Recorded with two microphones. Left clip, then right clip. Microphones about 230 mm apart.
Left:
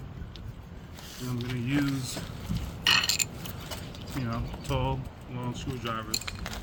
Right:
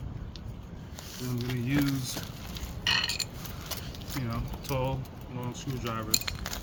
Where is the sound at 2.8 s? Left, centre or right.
Left.